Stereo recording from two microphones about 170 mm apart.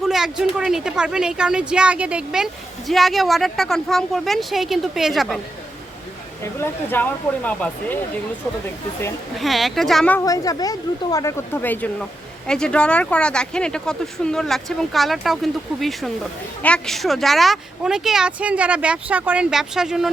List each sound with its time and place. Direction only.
0.0 s speech: 5° right (ahead or behind)
6.4 s speech: 15° left (ahead or behind)
9.4 s speech: centre (ahead or behind)
10.2 s speech: 20° left (ahead or behind); by 20.1 s 5° right (ahead or behind)